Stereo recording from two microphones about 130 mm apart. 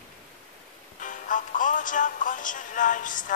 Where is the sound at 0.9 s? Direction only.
90° left.